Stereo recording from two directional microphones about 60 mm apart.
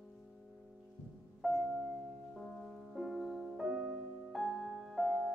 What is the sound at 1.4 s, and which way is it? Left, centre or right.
Music, centre.